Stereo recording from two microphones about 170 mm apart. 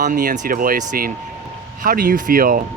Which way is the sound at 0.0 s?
50° right (ahead or behind).